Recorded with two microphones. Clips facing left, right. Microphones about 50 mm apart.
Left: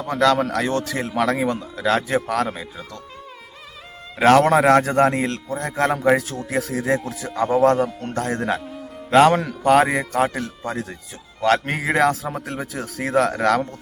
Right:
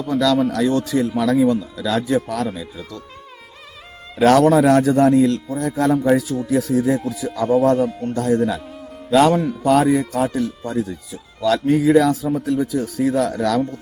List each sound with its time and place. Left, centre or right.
0.0 s a man's voice: left
4.2 s a man's voice: left